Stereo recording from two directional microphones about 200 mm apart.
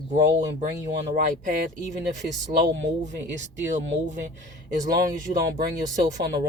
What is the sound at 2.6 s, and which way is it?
Speech, 35° right (ahead or behind).